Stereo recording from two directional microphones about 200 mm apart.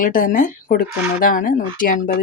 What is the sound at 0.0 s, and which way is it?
Speech, 40° left (ahead or behind).